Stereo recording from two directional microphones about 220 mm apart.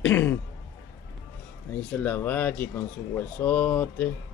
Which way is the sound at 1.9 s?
10° left (ahead or behind).